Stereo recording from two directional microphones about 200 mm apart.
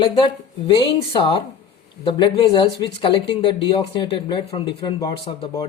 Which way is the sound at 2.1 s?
25° left (ahead or behind).